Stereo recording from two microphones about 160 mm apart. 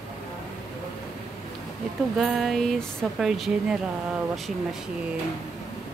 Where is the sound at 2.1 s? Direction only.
Centre (ahead or behind).